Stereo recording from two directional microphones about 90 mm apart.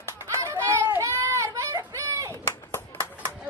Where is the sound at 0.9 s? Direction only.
30° right (ahead or behind).